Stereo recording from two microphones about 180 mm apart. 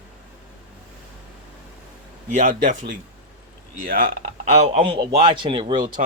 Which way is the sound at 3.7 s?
50° right (ahead or behind).